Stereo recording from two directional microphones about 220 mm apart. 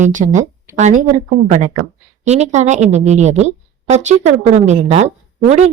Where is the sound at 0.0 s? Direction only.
35° right (ahead or behind).